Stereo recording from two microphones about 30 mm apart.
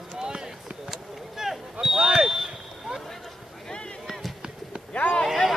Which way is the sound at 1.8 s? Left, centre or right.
Right.